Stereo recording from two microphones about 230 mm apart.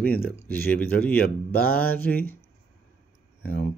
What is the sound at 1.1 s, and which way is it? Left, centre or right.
Speech, left.